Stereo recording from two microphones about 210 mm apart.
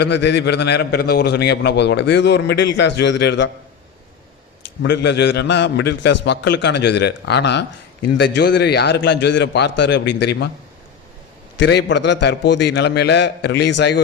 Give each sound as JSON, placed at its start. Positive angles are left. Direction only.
{"t": 0.0, "sound": "a man's voice", "side_deg": 55}
{"t": 4.8, "sound": "a man's voice", "side_deg": 55}
{"t": 11.5, "sound": "a man's voice", "side_deg": 55}